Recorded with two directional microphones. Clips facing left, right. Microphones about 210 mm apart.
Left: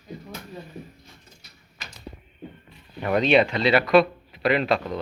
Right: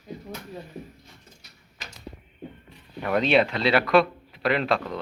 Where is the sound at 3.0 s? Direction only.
Centre (ahead or behind).